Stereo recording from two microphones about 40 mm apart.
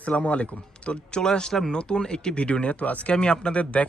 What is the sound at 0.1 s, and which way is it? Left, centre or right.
Speech, left.